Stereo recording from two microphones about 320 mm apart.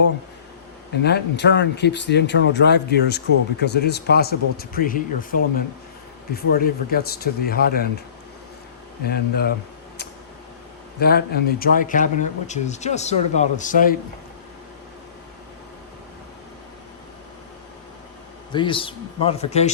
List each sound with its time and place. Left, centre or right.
1.0 s speech: left
9.0 s speech: left
11.0 s speech: left
18.5 s speech: centre